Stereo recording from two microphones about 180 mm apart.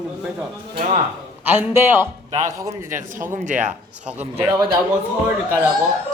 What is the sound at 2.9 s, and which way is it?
Speech, 45° right (ahead or behind).